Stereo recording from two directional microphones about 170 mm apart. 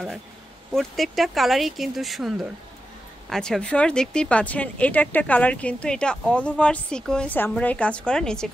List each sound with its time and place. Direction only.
0.7 s speech: centre (ahead or behind)